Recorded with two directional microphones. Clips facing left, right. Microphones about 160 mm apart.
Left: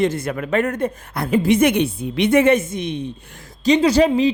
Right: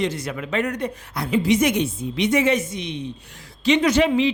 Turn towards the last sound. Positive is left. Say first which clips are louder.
# left 3 dB
turn(degrees=35)  # may be behind; listen again after turning